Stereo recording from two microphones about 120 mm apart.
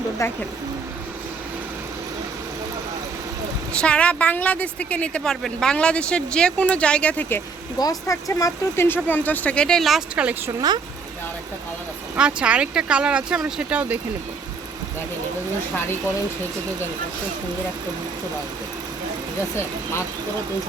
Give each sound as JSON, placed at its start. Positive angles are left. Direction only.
{"t": 0.2, "sound": "speech", "side_deg": 25}
{"t": 3.7, "sound": "a woman's voice", "side_deg": 10}
{"t": 7.8, "sound": "a woman's voice", "side_deg": 30}
{"t": 10.2, "sound": "speech", "side_deg": -10}
{"t": 12.1, "sound": "speech", "side_deg": -10}